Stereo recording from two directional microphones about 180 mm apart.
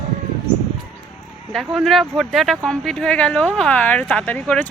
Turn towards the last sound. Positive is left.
turn(degrees=10)  # may be behind; listen again after turning